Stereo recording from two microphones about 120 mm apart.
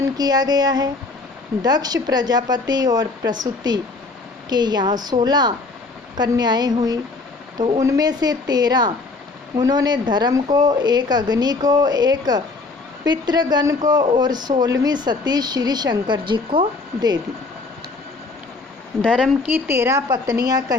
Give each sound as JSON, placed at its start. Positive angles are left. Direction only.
{"t": 0.0, "sound": "speech", "side_deg": -35}
{"t": 19.5, "sound": "a woman's voice", "side_deg": -20}
{"t": 20.1, "sound": "speech", "side_deg": -30}